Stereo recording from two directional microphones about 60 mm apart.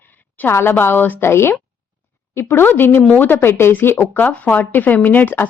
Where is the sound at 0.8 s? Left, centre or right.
Left.